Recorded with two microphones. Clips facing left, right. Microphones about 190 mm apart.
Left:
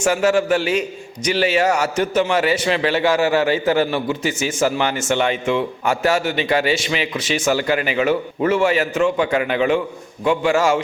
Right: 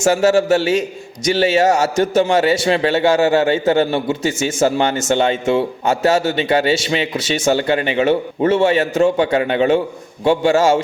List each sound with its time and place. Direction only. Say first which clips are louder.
0.0 s a man's voice: right 3 dB; 25° right (ahead or behind)